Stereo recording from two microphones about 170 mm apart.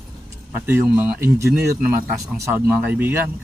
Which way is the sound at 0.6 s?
10° right (ahead or behind).